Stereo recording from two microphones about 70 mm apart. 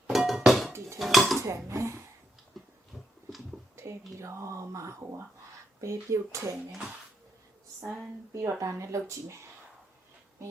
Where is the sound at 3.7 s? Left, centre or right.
Right.